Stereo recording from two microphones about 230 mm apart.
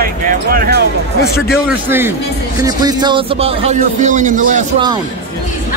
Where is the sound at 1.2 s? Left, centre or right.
Left.